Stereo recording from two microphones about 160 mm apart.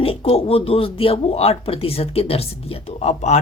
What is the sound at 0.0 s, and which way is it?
Speech, 35° left (ahead or behind).